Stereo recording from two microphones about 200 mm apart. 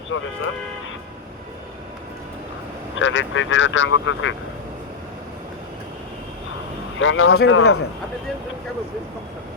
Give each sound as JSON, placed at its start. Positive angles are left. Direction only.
{"t": 0.1, "sound": "speech", "side_deg": 70}
{"t": 2.9, "sound": "speech", "side_deg": 70}
{"t": 7.0, "sound": "speech", "side_deg": 75}
{"t": 7.4, "sound": "speech", "side_deg": 90}